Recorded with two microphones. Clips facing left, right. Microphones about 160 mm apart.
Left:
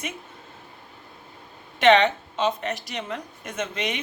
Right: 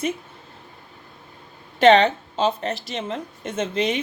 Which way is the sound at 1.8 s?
35° right (ahead or behind).